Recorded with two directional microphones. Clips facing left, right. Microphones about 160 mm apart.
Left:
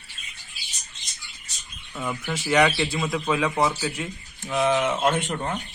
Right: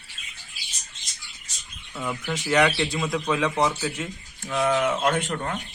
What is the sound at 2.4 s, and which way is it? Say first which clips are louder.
A man's voice: left 1 dB; centre (ahead or behind).